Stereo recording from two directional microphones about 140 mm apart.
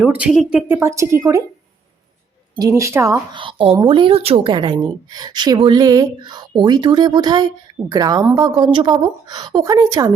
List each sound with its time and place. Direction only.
0.0 s a woman's voice: 10° right (ahead or behind)
0.8 s a woman's voice: 20° right (ahead or behind)
2.6 s a woman's voice: 20° right (ahead or behind)
3.3 s speech: 40° right (ahead or behind)
4.5 s a woman's voice: 35° right (ahead or behind)